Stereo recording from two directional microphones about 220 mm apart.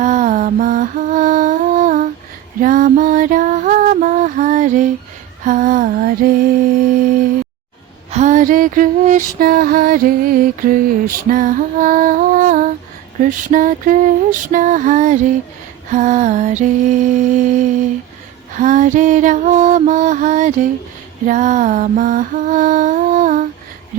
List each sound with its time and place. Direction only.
0.0 s music: 35° right (ahead or behind)
5.5 s a sound: 35° right (ahead or behind)
8.1 s music: 35° right (ahead or behind)